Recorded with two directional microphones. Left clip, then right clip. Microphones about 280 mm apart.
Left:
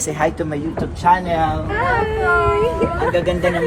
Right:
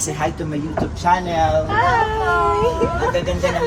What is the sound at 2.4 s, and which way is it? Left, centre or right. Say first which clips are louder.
Speech: left 1 dB; centre.